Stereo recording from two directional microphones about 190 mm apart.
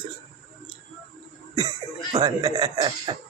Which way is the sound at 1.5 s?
20° right (ahead or behind).